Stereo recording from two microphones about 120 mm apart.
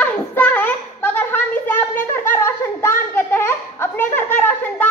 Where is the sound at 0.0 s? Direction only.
15° left (ahead or behind).